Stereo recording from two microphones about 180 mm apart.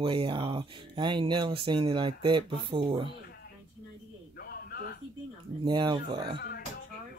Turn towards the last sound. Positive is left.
turn(degrees=-25)  # may be behind; listen again after turning